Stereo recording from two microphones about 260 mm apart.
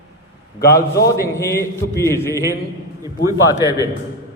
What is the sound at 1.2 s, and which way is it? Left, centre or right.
A man's voice, centre.